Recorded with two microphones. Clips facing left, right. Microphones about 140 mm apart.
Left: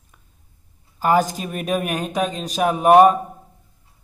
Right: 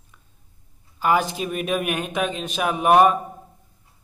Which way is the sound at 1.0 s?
40° left (ahead or behind).